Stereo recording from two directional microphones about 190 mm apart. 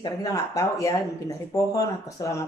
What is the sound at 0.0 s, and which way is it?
A woman's voice, 20° left (ahead or behind).